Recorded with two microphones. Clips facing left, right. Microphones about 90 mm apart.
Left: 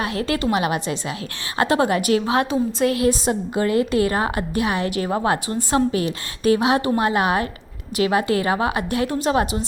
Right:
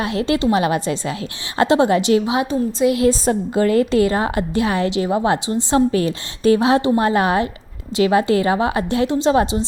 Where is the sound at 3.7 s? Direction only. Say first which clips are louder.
Right 2 dB; 30° right (ahead or behind).